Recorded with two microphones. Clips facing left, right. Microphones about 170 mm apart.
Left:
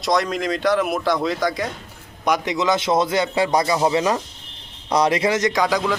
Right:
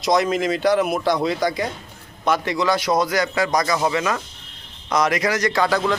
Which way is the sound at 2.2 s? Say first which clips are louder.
Even; 15° left (ahead or behind).